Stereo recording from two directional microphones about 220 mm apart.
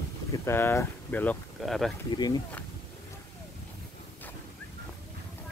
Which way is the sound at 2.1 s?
20° left (ahead or behind).